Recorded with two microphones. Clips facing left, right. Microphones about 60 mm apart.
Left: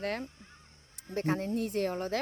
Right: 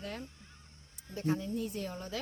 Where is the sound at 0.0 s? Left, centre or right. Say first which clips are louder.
Left 7 dB; left.